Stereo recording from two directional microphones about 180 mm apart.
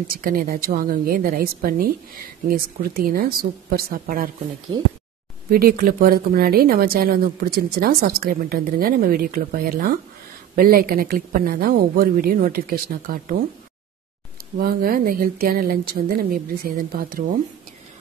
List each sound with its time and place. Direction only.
0.1 s a woman's voice: 55° right (ahead or behind)
5.5 s a woman's voice: 55° right (ahead or behind)
14.6 s speech: 55° right (ahead or behind)